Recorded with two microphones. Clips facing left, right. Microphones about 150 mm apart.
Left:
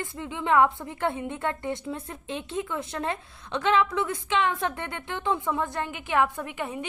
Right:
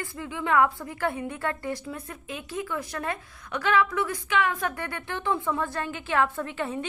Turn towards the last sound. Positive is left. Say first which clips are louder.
# right 2 dB
turn(degrees=15)  # may be behind; listen again after turning